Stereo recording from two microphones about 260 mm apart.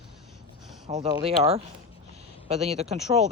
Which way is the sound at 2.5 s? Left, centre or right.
Right.